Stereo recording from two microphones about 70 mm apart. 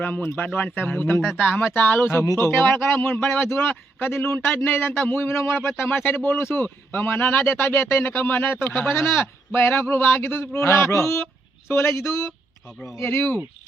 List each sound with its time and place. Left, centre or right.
0.2 s speech: left
0.4 s a man's voice: left